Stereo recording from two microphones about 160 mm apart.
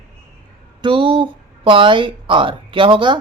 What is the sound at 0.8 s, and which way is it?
A woman's voice, 30° right (ahead or behind).